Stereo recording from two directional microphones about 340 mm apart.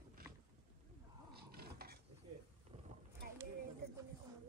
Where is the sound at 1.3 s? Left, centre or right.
Right.